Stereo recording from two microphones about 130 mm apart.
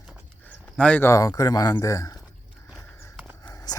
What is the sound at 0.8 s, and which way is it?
Speech, 10° left (ahead or behind).